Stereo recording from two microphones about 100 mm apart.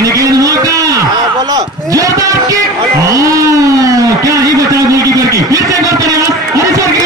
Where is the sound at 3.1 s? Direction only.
35° right (ahead or behind).